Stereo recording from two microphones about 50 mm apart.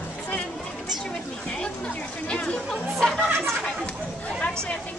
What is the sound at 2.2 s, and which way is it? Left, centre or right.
Speech, left.